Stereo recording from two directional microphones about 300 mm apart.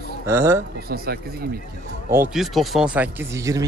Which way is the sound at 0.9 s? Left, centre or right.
Right.